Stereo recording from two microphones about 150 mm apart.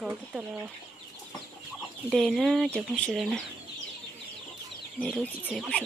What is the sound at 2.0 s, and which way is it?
Speech, centre (ahead or behind).